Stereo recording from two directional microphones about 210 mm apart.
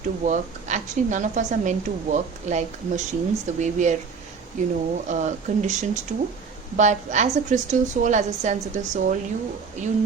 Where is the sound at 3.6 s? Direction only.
35° right (ahead or behind).